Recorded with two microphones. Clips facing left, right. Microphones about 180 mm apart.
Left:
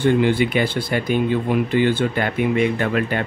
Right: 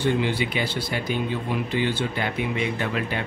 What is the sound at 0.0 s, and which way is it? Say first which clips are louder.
Speech: left 7 dB; 55° left (ahead or behind).